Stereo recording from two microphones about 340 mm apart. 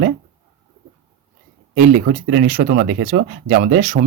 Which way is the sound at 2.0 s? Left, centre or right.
Right.